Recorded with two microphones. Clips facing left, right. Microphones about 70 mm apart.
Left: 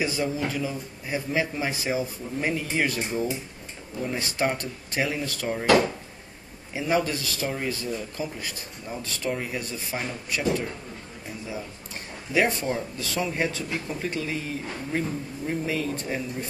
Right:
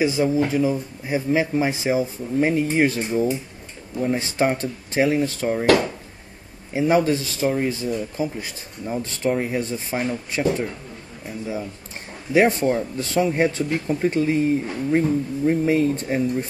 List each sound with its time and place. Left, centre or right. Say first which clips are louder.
0.0 s speech: right 7 dB; right
4.0 s speech: right 6 dB; right
6.7 s speech: right 7 dB; right
12.4 s speech: right 7 dB; right